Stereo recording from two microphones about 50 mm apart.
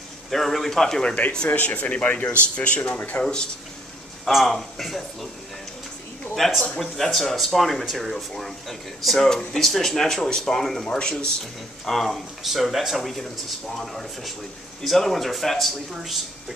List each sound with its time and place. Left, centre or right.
0.3 s speech: centre
1.5 s speech: left
4.3 s speech: centre
6.3 s speech: centre